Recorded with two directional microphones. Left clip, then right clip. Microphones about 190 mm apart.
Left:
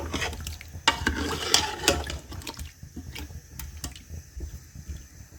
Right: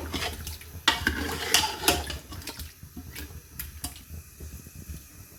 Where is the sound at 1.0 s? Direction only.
50° left (ahead or behind).